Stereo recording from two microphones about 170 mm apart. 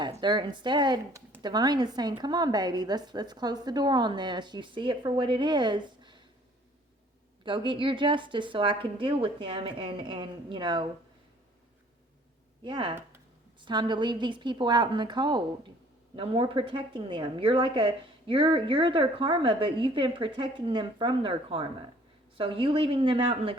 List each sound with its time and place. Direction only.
0.0 s a woman's voice: 25° right (ahead or behind)
7.4 s a woman's voice: 30° right (ahead or behind)
12.6 s a woman's voice: 30° right (ahead or behind)